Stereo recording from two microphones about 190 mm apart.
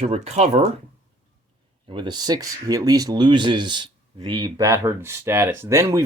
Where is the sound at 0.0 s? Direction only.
30° right (ahead or behind).